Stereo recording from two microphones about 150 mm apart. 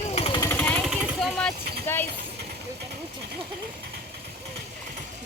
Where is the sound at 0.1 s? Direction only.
45° left (ahead or behind).